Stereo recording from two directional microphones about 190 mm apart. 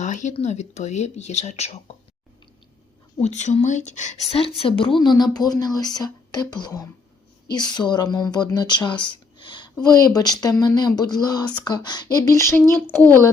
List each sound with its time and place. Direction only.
0.0 s speech: 40° left (ahead or behind)
3.2 s a woman's voice: 35° left (ahead or behind); by 13.1 s 10° left (ahead or behind)